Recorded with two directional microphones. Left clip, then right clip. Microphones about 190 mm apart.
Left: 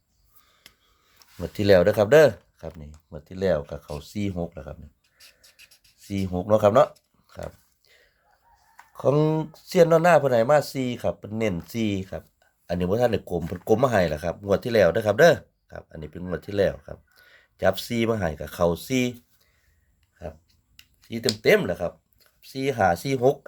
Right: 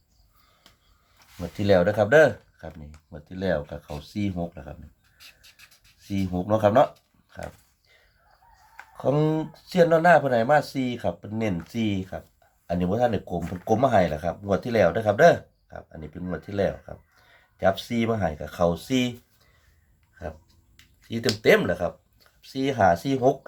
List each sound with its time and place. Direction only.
1.4 s speech: 55° left (ahead or behind)
6.0 s speech: 55° left (ahead or behind)
9.0 s speech: 50° left (ahead or behind)
20.2 s a sound: 30° left (ahead or behind)
21.1 s speech: 30° left (ahead or behind)